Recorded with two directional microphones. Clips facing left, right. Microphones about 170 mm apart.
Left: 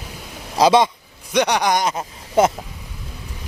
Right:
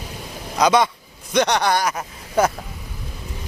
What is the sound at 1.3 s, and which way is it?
Speech, 10° left (ahead or behind).